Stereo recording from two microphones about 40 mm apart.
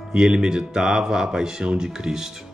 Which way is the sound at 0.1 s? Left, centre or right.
Centre.